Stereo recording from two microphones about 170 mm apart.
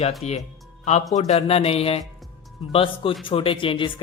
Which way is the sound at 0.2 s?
40° left (ahead or behind).